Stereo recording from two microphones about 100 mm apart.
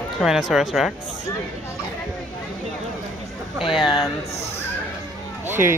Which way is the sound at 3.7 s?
5° right (ahead or behind).